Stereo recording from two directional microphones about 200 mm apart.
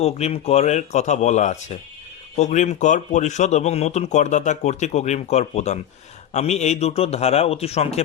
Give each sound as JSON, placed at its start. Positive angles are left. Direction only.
{"t": 0.0, "sound": "speech", "side_deg": 30}